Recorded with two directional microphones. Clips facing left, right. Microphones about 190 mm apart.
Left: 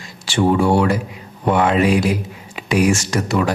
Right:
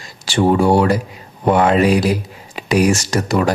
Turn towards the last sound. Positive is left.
turn(degrees=-40)  # may be behind; listen again after turning